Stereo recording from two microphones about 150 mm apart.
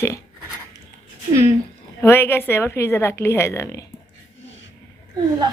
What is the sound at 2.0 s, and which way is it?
Speech, 15° left (ahead or behind).